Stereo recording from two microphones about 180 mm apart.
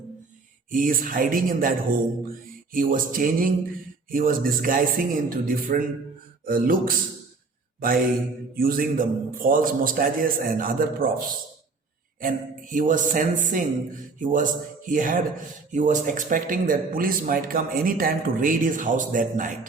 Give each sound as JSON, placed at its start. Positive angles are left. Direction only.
{"t": 0.7, "sound": "a man's voice", "side_deg": -50}
{"t": 2.7, "sound": "a man's voice", "side_deg": -50}
{"t": 12.2, "sound": "a man's voice", "side_deg": -50}